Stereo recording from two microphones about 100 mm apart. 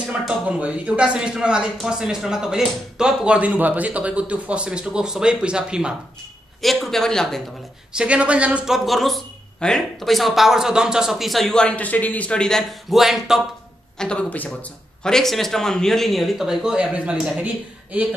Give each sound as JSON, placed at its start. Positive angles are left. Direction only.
{"t": 0.1, "sound": "a man's voice", "side_deg": -10}
{"t": 7.9, "sound": "a man's voice", "side_deg": -10}
{"t": 13.9, "sound": "speech", "side_deg": 10}
{"t": 15.0, "sound": "a man's voice", "side_deg": 5}